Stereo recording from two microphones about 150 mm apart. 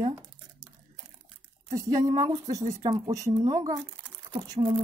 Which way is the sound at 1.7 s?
25° right (ahead or behind).